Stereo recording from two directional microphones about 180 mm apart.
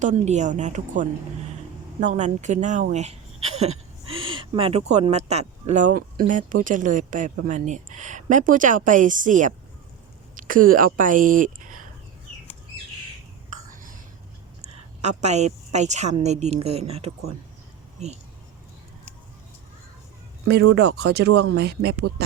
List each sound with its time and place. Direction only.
0.0 s a woman's voice: 40° right (ahead or behind)
13.5 s whispering: 50° right (ahead or behind)
14.7 s a woman's voice: 40° right (ahead or behind)
20.5 s speech: 65° right (ahead or behind)